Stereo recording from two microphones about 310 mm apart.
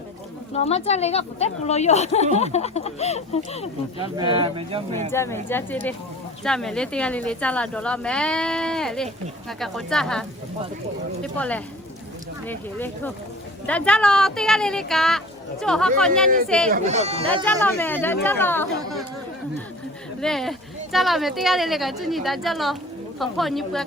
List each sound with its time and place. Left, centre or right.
0.5 s speech: centre
4.2 s speech: centre
5.1 s speech: centre
16.7 s speech: right
17.2 s speech: centre
20.2 s speech: centre